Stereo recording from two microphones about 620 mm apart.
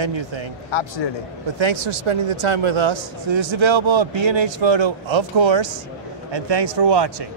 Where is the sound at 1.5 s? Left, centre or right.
Right.